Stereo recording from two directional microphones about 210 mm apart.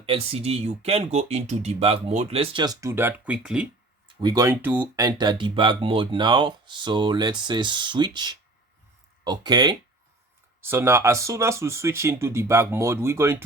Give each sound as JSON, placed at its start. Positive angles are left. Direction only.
{"t": 0.0, "sound": "speech", "side_deg": -30}
{"t": 4.2, "sound": "speech", "side_deg": -15}